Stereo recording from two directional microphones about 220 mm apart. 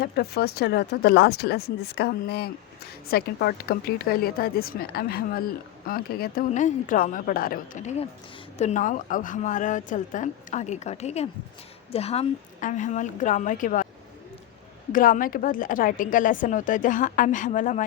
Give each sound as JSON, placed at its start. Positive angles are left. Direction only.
{"t": 0.0, "sound": "speech", "side_deg": 45}
{"t": 14.9, "sound": "speech", "side_deg": 40}